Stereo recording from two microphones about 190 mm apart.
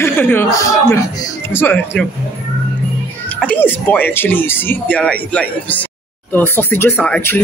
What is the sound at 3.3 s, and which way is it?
Speech, 10° left (ahead or behind).